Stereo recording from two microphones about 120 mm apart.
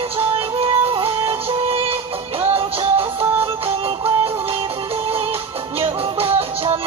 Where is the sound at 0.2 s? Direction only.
50° right (ahead or behind).